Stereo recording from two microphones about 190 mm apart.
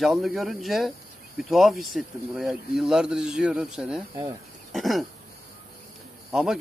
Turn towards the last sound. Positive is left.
turn(degrees=-5)  # may be behind; listen again after turning